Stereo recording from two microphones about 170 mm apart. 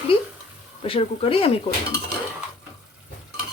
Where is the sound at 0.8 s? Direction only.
35° left (ahead or behind).